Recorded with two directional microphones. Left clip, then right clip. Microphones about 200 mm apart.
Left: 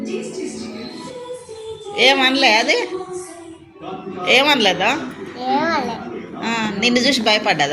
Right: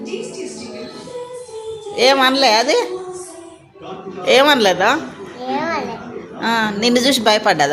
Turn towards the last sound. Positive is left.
turn(degrees=-30)  # may be behind; listen again after turning